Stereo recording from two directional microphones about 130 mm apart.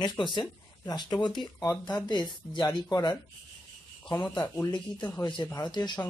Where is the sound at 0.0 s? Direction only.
35° left (ahead or behind).